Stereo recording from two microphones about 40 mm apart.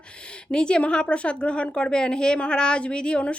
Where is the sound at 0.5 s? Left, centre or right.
Left.